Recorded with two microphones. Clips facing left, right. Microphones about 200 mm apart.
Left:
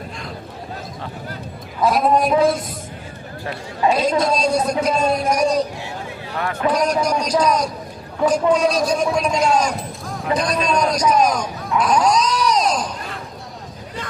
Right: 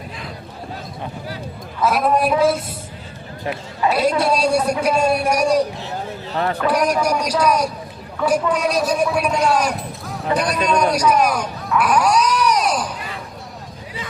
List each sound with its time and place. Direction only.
2.0 s speech: 5° right (ahead or behind)
3.9 s a woman's voice: 10° right (ahead or behind)
6.3 s a man's voice: 30° right (ahead or behind)
6.7 s a woman's voice: 10° right (ahead or behind)
11.8 s a sound: 10° right (ahead or behind)